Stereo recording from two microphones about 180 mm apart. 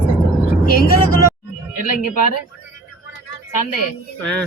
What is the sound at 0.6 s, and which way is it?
Vehicle, 55° left (ahead or behind).